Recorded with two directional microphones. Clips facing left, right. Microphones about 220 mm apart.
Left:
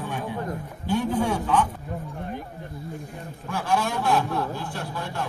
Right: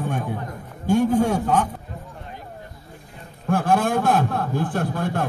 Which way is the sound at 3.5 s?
50° right (ahead or behind).